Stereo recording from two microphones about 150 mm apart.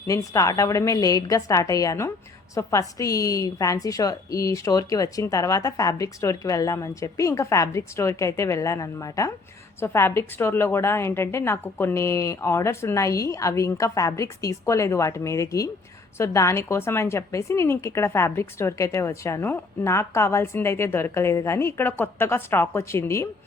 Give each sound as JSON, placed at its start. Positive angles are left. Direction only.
{"t": 0.1, "sound": "a woman's voice", "side_deg": 20}